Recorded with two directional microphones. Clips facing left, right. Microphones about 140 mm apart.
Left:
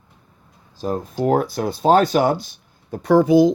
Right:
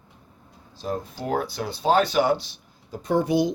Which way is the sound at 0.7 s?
40° left (ahead or behind).